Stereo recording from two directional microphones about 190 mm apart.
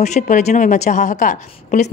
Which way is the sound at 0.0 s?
35° left (ahead or behind).